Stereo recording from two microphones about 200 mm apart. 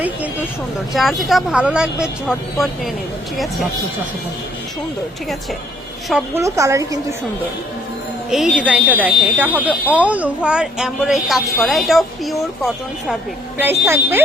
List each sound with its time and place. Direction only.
0.9 s a woman's voice: centre (ahead or behind)
6.1 s a woman's voice: 5° right (ahead or behind)
6.4 s speech: 15° right (ahead or behind)
8.3 s a woman's voice: centre (ahead or behind)
13.6 s speech: 10° right (ahead or behind)